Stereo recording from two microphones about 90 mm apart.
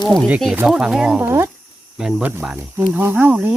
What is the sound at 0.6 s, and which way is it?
Speech, 5° right (ahead or behind).